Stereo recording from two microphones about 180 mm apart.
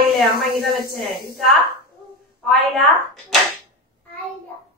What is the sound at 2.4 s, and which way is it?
Speech, centre (ahead or behind).